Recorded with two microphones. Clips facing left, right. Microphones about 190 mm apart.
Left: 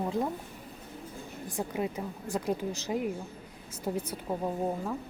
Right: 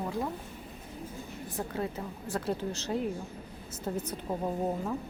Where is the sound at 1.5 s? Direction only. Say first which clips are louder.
Left 2 dB; 15° left (ahead or behind).